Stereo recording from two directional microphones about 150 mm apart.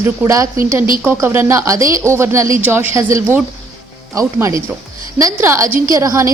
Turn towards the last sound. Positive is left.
turn(degrees=-20)  # may be behind; listen again after turning